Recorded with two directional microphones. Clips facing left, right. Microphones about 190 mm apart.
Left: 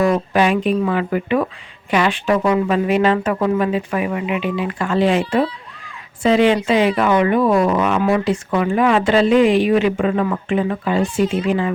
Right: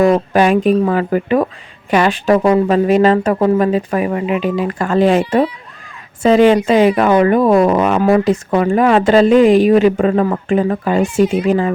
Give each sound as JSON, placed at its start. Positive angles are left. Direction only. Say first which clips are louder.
{"t": 0.0, "sound": "a woman's voice", "louder": "right 4 dB", "side_deg": -45}
{"t": 6.2, "sound": "a woman's voice", "louder": "right 4 dB", "side_deg": -45}